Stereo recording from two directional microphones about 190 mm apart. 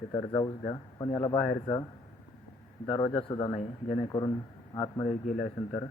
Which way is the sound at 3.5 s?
35° left (ahead or behind).